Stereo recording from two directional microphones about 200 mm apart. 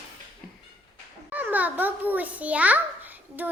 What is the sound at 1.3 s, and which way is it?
A child's voice, 10° right (ahead or behind).